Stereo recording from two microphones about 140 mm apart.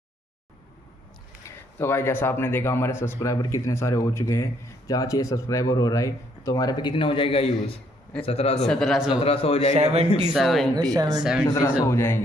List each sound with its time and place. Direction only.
1.8 s a man's voice: 15° left (ahead or behind); by 8.6 s 45° left (ahead or behind)
8.6 s speech: 5° left (ahead or behind)
9.1 s a man's voice: 45° left (ahead or behind)
9.8 s a man's voice: 50° right (ahead or behind)
10.3 s speech: centre (ahead or behind)
10.8 s speech: 30° right (ahead or behind)
11.4 s speech: 20° left (ahead or behind)